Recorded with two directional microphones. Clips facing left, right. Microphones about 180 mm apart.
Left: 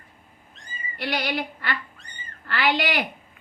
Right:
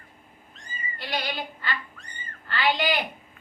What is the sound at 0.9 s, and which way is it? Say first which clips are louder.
Female singing: left 5 dB; 75° left (ahead or behind).